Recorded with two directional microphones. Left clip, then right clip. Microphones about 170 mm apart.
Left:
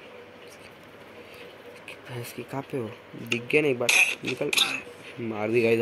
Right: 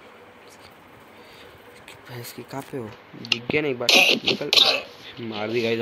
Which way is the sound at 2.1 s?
Centre (ahead or behind).